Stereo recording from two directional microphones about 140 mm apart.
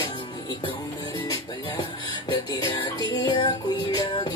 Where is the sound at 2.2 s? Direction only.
30° left (ahead or behind).